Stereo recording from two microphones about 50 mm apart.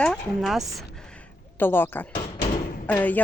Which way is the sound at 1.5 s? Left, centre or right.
Left.